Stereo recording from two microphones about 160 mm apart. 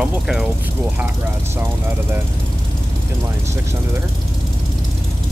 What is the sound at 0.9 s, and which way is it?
Speech, 15° right (ahead or behind).